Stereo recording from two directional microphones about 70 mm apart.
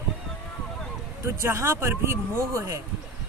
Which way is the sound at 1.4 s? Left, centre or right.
Right.